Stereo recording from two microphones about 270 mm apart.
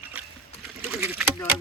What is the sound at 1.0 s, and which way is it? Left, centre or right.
Rowboat, centre.